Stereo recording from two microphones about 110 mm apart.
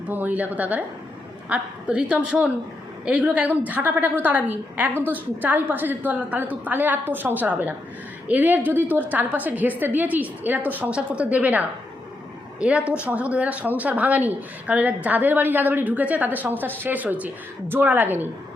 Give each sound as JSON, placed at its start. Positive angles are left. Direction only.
{"t": 0.1, "sound": "a woman's voice", "side_deg": -15}
{"t": 12.8, "sound": "speech", "side_deg": 20}
{"t": 13.1, "sound": "speech", "side_deg": -10}